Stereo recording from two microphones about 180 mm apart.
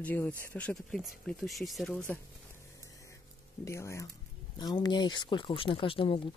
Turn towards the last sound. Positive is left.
turn(degrees=30)  # may be behind; listen again after turning